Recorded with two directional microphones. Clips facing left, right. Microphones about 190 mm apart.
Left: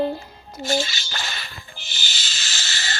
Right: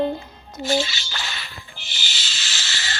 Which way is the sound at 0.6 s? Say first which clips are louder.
Right 1 dB; 45° left (ahead or behind).